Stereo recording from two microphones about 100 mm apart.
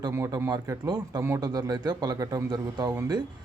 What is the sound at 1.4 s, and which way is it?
A man's voice, 40° right (ahead or behind).